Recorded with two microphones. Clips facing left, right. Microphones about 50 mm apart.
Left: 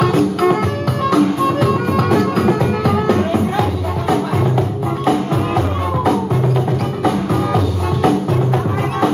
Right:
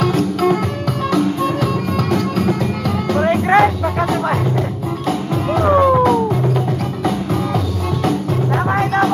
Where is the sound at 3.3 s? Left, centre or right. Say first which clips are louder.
Right 5 dB; right.